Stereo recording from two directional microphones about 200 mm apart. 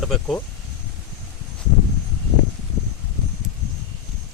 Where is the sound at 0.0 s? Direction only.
5° left (ahead or behind).